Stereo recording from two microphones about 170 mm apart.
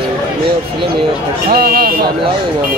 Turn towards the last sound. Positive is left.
turn(degrees=-65)  # may be behind; listen again after turning